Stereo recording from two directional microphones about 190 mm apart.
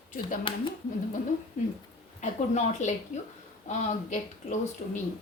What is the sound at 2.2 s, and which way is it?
A woman's voice, 40° left (ahead or behind).